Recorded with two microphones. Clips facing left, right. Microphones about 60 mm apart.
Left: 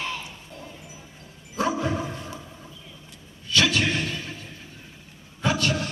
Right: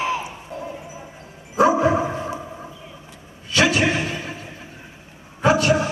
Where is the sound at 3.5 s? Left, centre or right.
Right.